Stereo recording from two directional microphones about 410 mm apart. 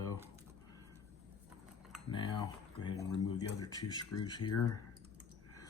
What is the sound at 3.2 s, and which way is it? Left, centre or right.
Speech, centre.